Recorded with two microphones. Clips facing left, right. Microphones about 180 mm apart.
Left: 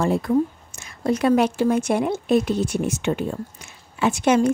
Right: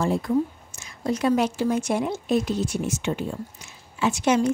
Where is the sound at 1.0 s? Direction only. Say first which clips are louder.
Left 4 dB; 60° left (ahead or behind).